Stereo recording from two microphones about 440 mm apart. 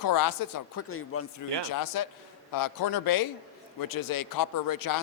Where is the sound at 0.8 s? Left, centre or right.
Left.